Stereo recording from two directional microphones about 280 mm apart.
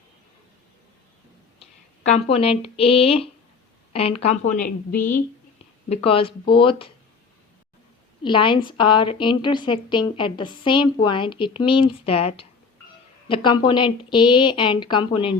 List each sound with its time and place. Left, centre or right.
2.3 s speech: centre
5.9 s a woman's voice: centre
8.2 s a woman's voice: centre